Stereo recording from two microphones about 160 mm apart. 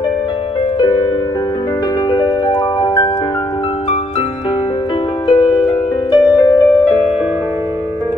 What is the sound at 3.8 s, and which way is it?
Music, 40° left (ahead or behind).